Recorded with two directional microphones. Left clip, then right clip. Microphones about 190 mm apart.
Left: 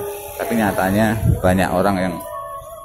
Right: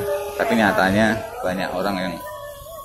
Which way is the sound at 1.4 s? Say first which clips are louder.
Left 7 dB; 25° left (ahead or behind).